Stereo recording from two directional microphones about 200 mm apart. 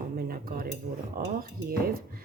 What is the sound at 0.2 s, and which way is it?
Dishes, 50° right (ahead or behind).